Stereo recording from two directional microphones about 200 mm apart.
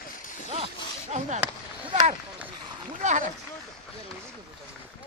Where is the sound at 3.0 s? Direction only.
40° right (ahead or behind).